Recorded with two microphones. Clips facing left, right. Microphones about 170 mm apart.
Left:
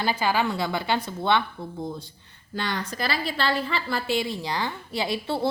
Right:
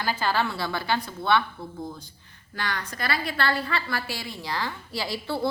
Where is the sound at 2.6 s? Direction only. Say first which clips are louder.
Left 3 dB; 25° left (ahead or behind).